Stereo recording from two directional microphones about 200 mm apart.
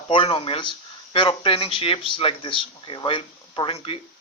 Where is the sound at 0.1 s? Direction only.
25° left (ahead or behind).